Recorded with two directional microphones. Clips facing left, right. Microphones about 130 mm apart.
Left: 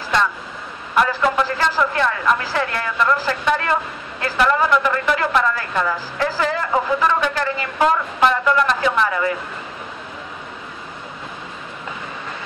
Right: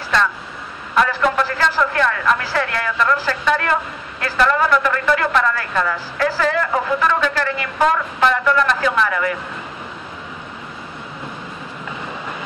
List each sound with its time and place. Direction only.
1.0 s a man's voice: 20° left (ahead or behind)